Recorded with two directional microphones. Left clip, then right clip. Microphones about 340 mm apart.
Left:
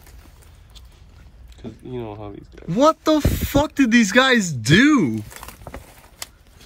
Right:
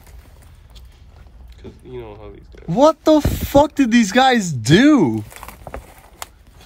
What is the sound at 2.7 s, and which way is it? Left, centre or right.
Speech, centre.